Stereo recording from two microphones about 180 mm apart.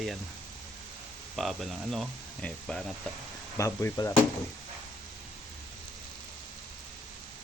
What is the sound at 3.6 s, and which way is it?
Speech, 15° left (ahead or behind).